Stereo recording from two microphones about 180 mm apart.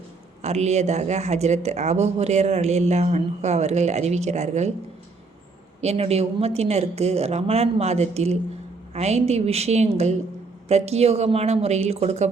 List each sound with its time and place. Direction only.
0.4 s speech: 40° right (ahead or behind)
5.8 s speech: 35° right (ahead or behind)